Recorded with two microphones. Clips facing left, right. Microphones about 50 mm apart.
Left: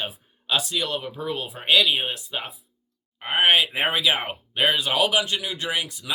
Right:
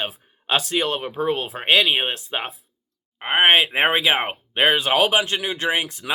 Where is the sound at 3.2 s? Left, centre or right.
Right.